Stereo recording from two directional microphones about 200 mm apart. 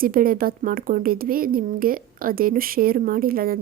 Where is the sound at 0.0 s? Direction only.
45° right (ahead or behind).